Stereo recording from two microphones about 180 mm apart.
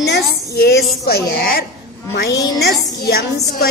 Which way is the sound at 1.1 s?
55° left (ahead or behind).